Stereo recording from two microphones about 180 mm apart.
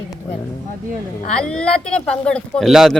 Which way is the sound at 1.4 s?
5° left (ahead or behind).